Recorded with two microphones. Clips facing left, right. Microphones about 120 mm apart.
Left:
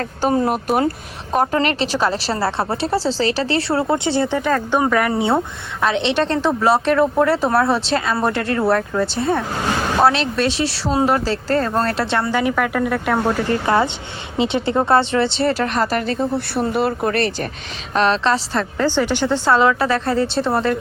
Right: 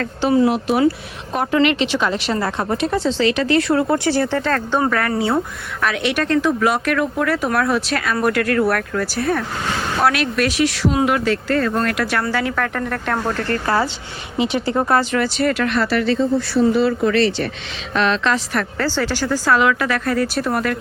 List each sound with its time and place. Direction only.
0.0 s a woman's voice: 40° left (ahead or behind); by 4.4 s 25° left (ahead or behind)
4.4 s speech: 10° left (ahead or behind)
5.1 s speech: 25° left (ahead or behind); by 16.2 s 45° left (ahead or behind)
16.3 s speech: 60° left (ahead or behind)
17.9 s a woman's voice: 35° left (ahead or behind)
18.8 s speech: 20° left (ahead or behind)